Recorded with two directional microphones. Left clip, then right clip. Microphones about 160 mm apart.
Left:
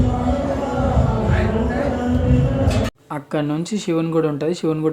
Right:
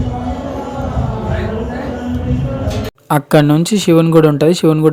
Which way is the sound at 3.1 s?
60° right (ahead or behind).